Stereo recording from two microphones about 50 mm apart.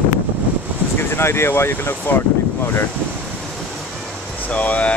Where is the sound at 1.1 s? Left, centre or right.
Left.